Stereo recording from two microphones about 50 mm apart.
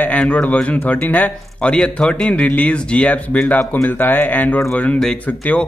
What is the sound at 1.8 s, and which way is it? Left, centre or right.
Speech, centre.